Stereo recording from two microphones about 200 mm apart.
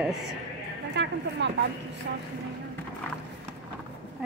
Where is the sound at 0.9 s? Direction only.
60° right (ahead or behind).